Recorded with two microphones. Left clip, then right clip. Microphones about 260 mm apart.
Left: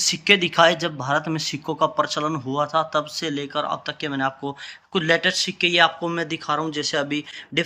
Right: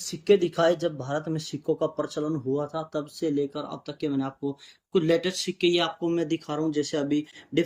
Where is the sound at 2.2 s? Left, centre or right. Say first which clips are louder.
Left 5 dB; left.